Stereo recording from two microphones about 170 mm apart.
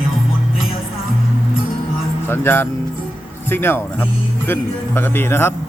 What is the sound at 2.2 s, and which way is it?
Speech, 15° left (ahead or behind).